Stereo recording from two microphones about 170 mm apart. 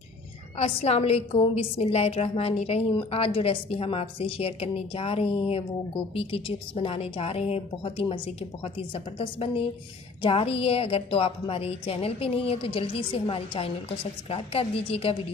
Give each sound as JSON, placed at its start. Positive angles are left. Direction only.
{"t": 0.6, "sound": "a woman's voice", "side_deg": 35}